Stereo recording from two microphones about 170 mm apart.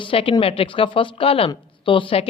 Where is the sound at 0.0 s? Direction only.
30° left (ahead or behind).